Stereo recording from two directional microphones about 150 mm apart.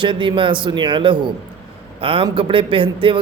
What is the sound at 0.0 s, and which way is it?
Speech, 35° right (ahead or behind).